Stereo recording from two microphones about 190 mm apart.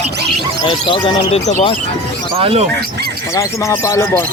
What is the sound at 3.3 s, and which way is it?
Speech, 15° left (ahead or behind).